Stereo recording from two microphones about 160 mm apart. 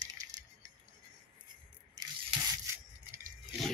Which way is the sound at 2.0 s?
25° right (ahead or behind).